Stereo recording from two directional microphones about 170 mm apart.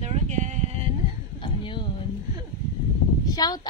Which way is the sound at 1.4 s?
30° left (ahead or behind).